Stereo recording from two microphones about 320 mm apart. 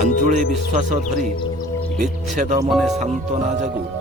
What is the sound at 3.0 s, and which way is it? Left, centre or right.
Speech, right.